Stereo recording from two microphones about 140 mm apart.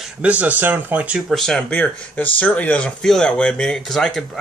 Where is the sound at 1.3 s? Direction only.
5° left (ahead or behind).